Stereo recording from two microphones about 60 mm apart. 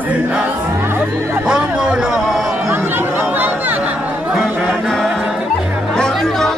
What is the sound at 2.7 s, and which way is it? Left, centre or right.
Chatter, right.